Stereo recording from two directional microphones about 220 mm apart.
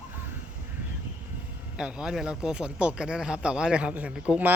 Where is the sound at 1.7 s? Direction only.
5° right (ahead or behind).